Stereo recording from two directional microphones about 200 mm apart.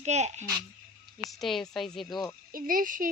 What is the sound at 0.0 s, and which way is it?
Speech, 35° right (ahead or behind).